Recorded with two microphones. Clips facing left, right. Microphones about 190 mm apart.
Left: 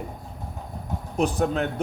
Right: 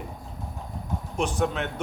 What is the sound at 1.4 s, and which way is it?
Speech, 35° left (ahead or behind).